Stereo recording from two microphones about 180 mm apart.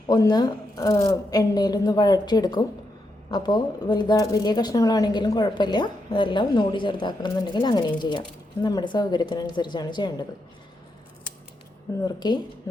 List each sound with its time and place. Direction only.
0.1 s speech: 20° left (ahead or behind)
12.0 s speech: 25° left (ahead or behind)